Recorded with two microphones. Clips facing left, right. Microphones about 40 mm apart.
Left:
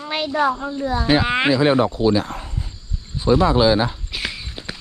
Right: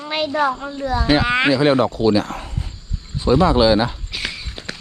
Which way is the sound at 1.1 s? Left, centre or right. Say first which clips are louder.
Right 1 dB; right.